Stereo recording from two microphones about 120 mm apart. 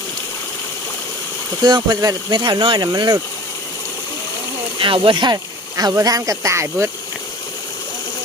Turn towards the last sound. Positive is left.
turn(degrees=-25)  # may be behind; listen again after turning